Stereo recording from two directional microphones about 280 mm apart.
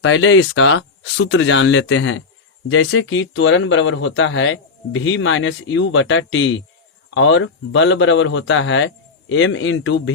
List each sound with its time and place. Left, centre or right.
0.0 s speech: left